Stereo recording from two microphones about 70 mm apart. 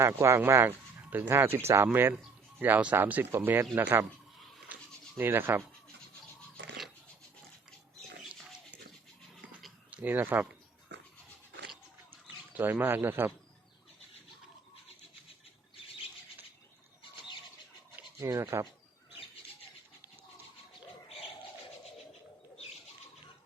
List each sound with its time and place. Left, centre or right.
0.0 s speech: right
4.7 s bleat: right
5.1 s speech: right
9.9 s speech: right
12.1 s speech: right
18.2 s speech: right